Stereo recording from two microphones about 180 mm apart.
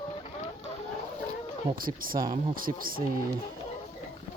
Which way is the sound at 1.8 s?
55° right (ahead or behind).